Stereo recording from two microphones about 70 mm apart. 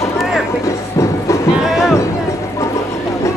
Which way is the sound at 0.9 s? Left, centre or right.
Left.